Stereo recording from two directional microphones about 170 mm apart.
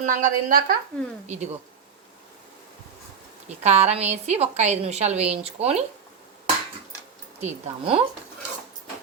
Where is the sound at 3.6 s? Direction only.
40° right (ahead or behind).